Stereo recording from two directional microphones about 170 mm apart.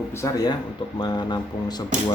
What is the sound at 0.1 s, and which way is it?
Speech, 15° left (ahead or behind).